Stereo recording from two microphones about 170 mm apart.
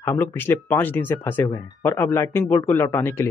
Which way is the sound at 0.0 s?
15° left (ahead or behind).